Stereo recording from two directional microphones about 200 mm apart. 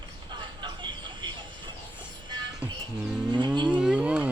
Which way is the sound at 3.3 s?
20° right (ahead or behind).